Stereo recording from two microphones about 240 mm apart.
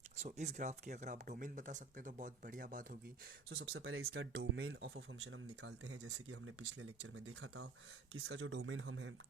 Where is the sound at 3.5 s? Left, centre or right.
Right.